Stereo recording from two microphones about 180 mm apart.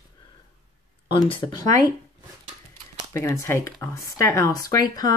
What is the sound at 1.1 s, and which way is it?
Speech, 30° left (ahead or behind).